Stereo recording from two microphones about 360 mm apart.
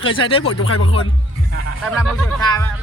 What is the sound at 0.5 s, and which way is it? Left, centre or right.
Speech, left.